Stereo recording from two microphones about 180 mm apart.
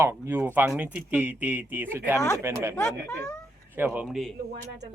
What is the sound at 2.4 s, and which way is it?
A woman's voice, 15° right (ahead or behind).